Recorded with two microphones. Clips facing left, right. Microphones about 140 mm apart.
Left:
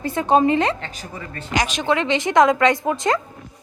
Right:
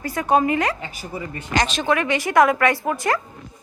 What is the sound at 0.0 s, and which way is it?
Speech, 25° left (ahead or behind).